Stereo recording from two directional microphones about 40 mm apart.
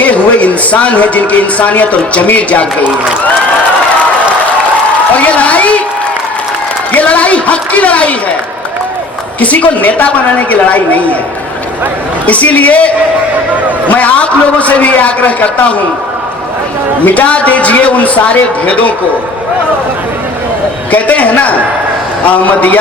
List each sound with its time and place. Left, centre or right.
0.0 s a man's voice: left
5.1 s a sound: left
6.9 s a man's voice: left
9.4 s a man's voice: left
12.2 s a man's voice: left
17.1 s a man's voice: left
20.9 s a man's voice: left